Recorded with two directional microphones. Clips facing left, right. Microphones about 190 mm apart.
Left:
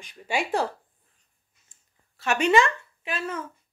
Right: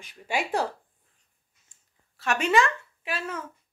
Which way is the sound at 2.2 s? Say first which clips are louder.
Left 2 dB; centre (ahead or behind).